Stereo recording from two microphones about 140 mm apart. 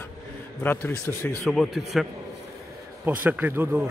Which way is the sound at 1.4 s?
Centre (ahead or behind).